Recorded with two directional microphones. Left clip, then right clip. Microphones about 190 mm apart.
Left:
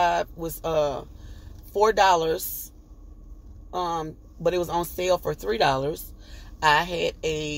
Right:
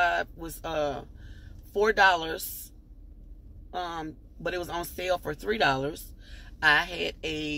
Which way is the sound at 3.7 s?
10° left (ahead or behind).